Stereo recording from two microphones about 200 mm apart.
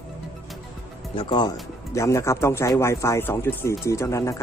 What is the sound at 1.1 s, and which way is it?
Speech, 25° left (ahead or behind).